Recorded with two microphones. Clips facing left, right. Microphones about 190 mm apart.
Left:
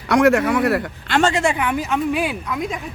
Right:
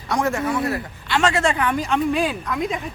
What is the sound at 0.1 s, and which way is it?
A man's voice, 70° left (ahead or behind).